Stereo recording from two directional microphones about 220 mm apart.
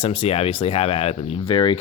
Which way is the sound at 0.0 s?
25° left (ahead or behind).